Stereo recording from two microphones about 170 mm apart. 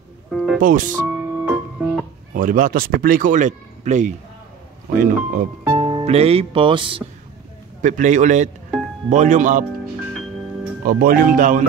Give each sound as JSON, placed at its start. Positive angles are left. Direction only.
{"t": 0.6, "sound": "speech", "side_deg": -50}
{"t": 1.0, "sound": "music", "side_deg": -5}
{"t": 2.3, "sound": "speech", "side_deg": -50}
{"t": 5.8, "sound": "speech", "side_deg": -30}
{"t": 7.8, "sound": "speech", "side_deg": -45}
{"t": 10.8, "sound": "speech", "side_deg": -55}